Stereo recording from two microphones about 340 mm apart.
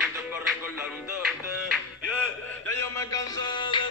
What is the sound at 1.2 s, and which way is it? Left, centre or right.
Music, centre.